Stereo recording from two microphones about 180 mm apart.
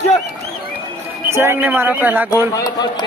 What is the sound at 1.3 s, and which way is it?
Speech, 15° right (ahead or behind).